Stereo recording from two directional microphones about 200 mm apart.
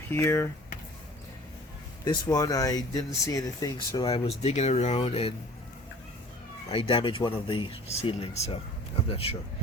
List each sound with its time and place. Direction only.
0.1 s speech: 10° left (ahead or behind)
2.0 s speech: 20° left (ahead or behind)
6.7 s speech: 25° left (ahead or behind)